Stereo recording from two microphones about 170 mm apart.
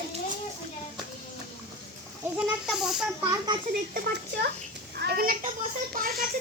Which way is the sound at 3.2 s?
25° right (ahead or behind).